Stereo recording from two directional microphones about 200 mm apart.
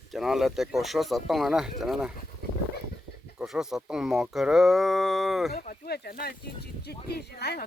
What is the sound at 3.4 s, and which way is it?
Speech, centre (ahead or behind).